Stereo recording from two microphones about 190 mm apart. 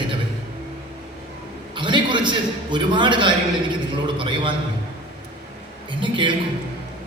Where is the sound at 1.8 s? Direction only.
25° right (ahead or behind).